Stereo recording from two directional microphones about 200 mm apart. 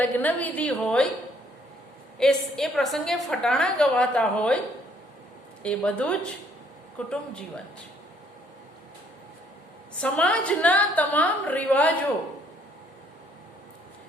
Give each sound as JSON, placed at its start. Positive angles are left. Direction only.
{"t": 0.0, "sound": "a woman's voice", "side_deg": 10}
{"t": 2.1, "sound": "a woman's voice", "side_deg": 0}
{"t": 5.6, "sound": "a woman's voice", "side_deg": 5}
{"t": 10.0, "sound": "a woman's voice", "side_deg": 5}